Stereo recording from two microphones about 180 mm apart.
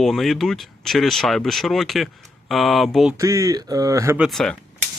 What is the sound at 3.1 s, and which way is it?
Speech, 15° right (ahead or behind).